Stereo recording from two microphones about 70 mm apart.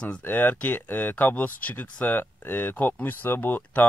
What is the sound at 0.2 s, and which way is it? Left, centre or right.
Speech, left.